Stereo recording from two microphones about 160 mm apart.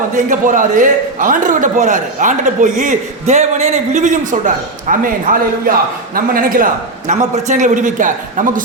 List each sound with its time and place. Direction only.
0.3 s a man's voice: 55° right (ahead or behind)
7.1 s a man's voice: 45° right (ahead or behind)